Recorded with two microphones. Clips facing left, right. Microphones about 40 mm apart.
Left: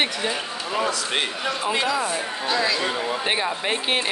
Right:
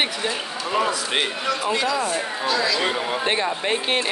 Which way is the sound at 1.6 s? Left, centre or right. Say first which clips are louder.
Left 1 dB; centre.